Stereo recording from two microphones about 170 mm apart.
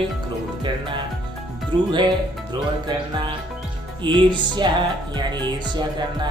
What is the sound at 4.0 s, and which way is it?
Music, 30° right (ahead or behind).